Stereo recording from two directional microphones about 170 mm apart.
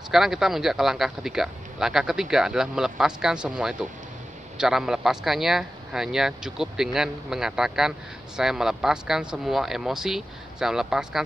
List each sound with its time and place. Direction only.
0.1 s speech: centre (ahead or behind)